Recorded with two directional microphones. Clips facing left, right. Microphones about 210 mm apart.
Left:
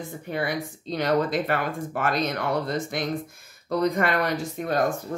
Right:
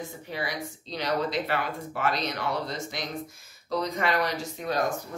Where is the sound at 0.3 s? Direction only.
55° left (ahead or behind).